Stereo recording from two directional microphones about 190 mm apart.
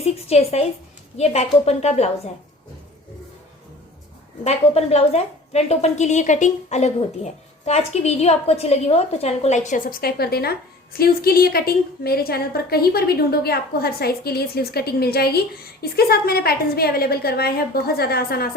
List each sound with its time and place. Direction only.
0.0 s a woman's voice: 35° left (ahead or behind)
4.4 s a woman's voice: 35° left (ahead or behind); by 18.4 s 55° left (ahead or behind)